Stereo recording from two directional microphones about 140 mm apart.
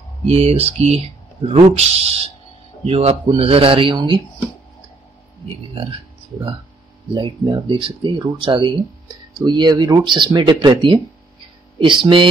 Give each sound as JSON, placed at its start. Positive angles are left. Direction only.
{"t": 0.3, "sound": "speech", "side_deg": -50}
{"t": 7.2, "sound": "speech", "side_deg": -35}